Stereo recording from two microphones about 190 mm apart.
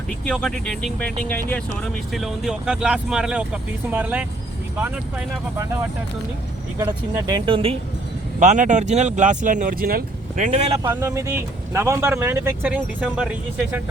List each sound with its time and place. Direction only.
0.3 s speech: 5° left (ahead or behind); by 7.8 s 30° right (ahead or behind)
8.4 s speech: 40° right (ahead or behind)
10.8 s speech: 15° right (ahead or behind)